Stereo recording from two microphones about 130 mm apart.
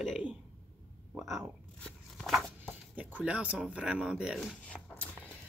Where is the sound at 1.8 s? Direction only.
5° left (ahead or behind).